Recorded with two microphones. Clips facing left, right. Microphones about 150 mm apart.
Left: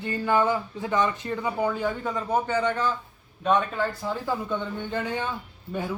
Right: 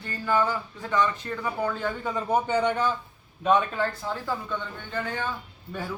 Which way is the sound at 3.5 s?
Centre (ahead or behind).